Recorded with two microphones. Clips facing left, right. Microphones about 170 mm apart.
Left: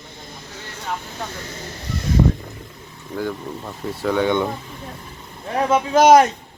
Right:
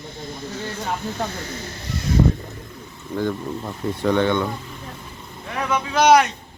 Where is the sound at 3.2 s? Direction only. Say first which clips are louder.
Right 2 dB; centre (ahead or behind).